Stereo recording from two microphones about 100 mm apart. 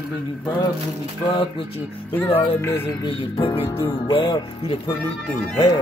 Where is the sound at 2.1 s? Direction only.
20° left (ahead or behind).